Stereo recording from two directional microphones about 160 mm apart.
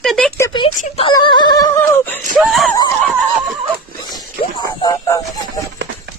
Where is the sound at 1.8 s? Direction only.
10° left (ahead or behind).